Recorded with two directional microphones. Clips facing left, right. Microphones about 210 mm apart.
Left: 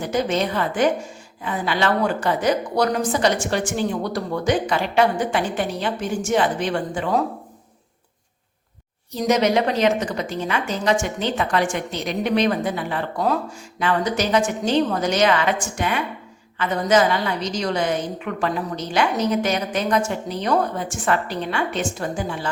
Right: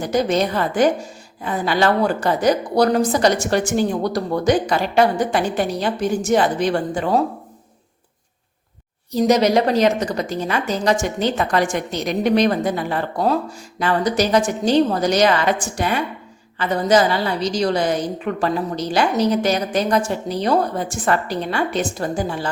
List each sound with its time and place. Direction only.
0.0 s a woman's voice: 40° right (ahead or behind)
9.2 s a woman's voice: 35° right (ahead or behind)